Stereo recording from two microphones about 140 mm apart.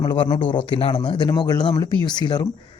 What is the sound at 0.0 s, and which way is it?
Speech, 35° left (ahead or behind).